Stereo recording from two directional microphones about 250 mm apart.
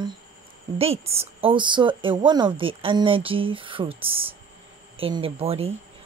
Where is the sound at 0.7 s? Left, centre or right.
Right.